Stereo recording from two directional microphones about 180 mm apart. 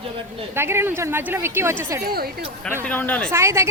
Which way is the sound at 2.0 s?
55° right (ahead or behind).